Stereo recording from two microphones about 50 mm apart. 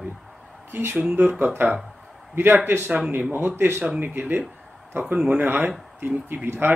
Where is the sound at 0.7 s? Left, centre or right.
Right.